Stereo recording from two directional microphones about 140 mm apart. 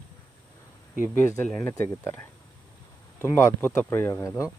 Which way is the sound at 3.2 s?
15° left (ahead or behind).